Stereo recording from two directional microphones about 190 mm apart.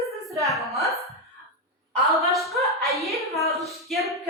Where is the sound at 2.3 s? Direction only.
Centre (ahead or behind).